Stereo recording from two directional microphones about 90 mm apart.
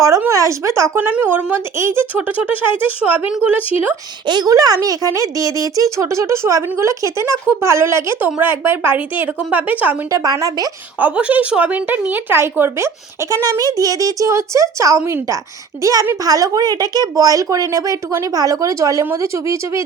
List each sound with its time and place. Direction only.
0.3 s speech: 35° right (ahead or behind)
0.9 s speech: 20° right (ahead or behind)
4.3 s speech: 45° right (ahead or behind); by 10.0 s 20° right (ahead or behind)
10.1 s speech: 35° right (ahead or behind)
11.0 s speech: 15° right (ahead or behind); by 19.8 s 35° right (ahead or behind)